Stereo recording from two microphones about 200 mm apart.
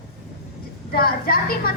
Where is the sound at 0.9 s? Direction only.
50° left (ahead or behind).